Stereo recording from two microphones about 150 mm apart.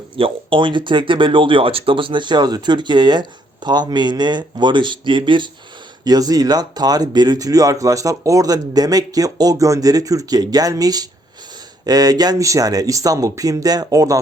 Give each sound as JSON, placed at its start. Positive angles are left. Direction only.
{"t": 0.2, "sound": "speech", "side_deg": -35}